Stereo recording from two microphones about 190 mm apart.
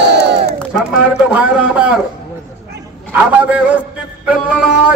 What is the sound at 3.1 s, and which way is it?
Speech, 5° right (ahead or behind).